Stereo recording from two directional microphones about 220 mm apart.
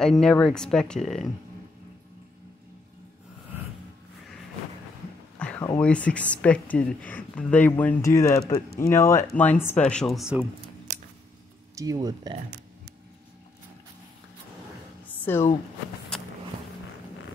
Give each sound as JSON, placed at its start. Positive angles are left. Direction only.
{"t": 0.0, "sound": "speech", "side_deg": 0}
{"t": 5.4, "sound": "a sound", "side_deg": 5}
{"t": 5.8, "sound": "speech", "side_deg": 5}
{"t": 10.9, "sound": "scissors", "side_deg": -35}
{"t": 11.7, "sound": "speech", "side_deg": -15}
{"t": 15.0, "sound": "a sound", "side_deg": 10}